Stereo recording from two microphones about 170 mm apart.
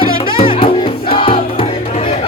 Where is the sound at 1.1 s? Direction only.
35° left (ahead or behind).